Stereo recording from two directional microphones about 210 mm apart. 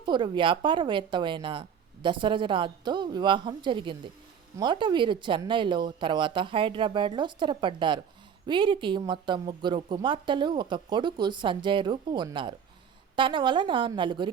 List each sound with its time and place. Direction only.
0.0 s speech: 20° right (ahead or behind)